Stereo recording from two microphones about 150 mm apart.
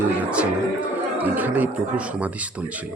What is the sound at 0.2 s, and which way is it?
Speech, 5° right (ahead or behind).